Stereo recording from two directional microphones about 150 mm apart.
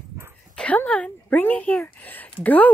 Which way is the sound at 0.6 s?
10° left (ahead or behind).